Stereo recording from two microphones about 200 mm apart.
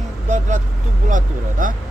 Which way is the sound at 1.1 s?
40° right (ahead or behind).